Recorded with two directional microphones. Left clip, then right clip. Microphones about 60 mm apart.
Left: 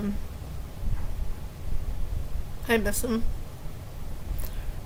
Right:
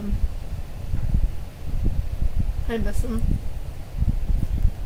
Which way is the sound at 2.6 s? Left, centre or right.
Left.